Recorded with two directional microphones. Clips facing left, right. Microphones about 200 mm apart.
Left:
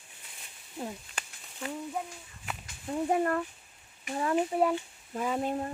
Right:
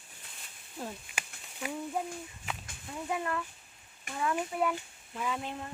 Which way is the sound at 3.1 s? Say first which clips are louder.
Left 5 dB; 40° left (ahead or behind).